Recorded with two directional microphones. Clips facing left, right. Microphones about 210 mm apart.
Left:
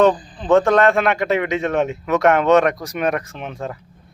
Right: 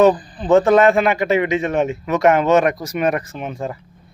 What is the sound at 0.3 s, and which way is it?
A man's voice, 5° right (ahead or behind).